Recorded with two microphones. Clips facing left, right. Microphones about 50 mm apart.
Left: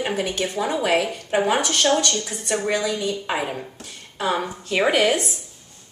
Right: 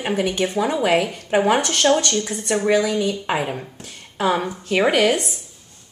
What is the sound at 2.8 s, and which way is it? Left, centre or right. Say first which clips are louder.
Speech: right 4 dB; right.